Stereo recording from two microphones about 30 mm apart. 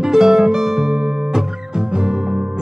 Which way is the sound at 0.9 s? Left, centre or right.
Right.